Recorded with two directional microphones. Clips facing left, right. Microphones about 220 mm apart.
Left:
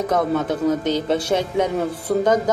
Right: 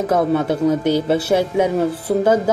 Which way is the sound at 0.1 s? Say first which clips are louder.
Right 4 dB; 10° right (ahead or behind).